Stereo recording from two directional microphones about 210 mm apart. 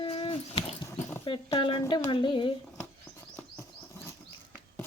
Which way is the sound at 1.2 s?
25° left (ahead or behind).